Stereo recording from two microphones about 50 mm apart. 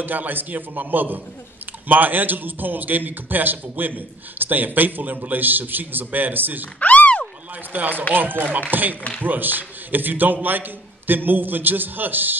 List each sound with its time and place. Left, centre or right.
0.0 s a man's voice: right
6.8 s a sound: left
7.7 s a man's voice: right